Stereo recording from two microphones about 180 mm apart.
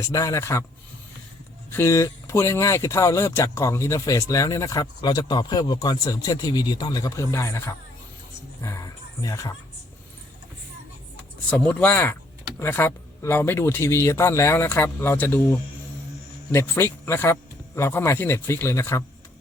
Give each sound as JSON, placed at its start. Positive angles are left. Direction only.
{"t": 0.1, "sound": "speech", "side_deg": 15}
{"t": 1.7, "sound": "speech", "side_deg": 15}
{"t": 11.5, "sound": "speech", "side_deg": 10}